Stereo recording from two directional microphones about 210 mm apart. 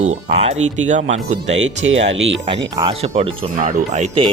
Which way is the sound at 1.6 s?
65° right (ahead or behind).